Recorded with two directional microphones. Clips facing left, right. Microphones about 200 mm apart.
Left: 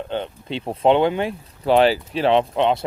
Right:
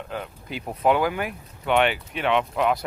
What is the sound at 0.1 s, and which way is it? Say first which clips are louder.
Speech: left 6 dB; 25° left (ahead or behind).